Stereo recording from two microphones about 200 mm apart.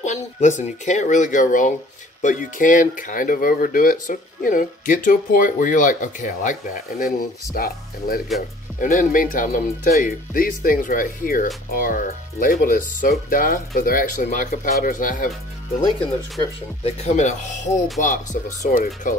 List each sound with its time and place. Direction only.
0.0 s speech: 35° left (ahead or behind)
16.8 s speech: 35° left (ahead or behind)